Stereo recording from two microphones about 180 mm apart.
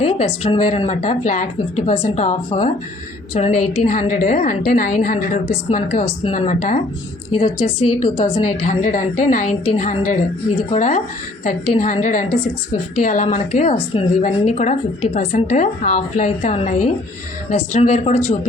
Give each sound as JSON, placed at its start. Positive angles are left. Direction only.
{"t": 0.0, "sound": "a woman's voice", "side_deg": 35}
{"t": 7.3, "sound": "a woman's voice", "side_deg": 30}
{"t": 8.2, "sound": "a woman's voice", "side_deg": 40}